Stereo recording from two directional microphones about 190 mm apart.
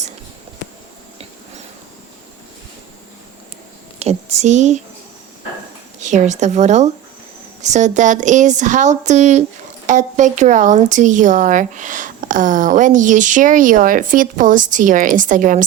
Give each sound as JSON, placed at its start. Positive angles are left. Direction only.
{"t": 4.0, "sound": "speech", "side_deg": -35}
{"t": 6.0, "sound": "speech", "side_deg": -40}